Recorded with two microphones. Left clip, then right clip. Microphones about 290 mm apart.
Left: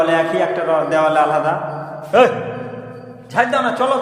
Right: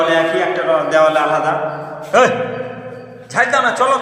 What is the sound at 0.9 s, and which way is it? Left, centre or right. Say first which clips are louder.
Speech: right 2 dB; centre.